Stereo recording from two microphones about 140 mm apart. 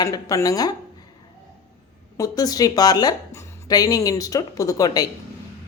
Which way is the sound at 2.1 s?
25° left (ahead or behind).